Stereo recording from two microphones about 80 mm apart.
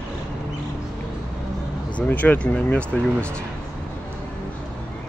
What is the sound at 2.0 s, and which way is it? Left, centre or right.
Speech, left.